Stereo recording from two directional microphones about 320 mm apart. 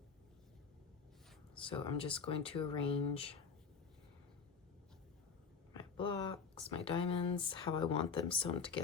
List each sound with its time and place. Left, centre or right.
1.5 s speech: centre
5.7 s speech: centre